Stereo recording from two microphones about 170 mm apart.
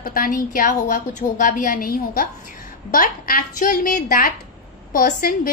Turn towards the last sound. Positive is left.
turn(degrees=60)  # may be behind; listen again after turning